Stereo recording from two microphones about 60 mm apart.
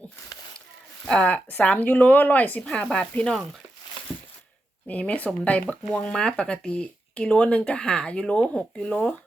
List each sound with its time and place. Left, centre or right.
1.0 s speech: centre
1.5 s speech: left
2.6 s speech: centre
4.9 s speech: left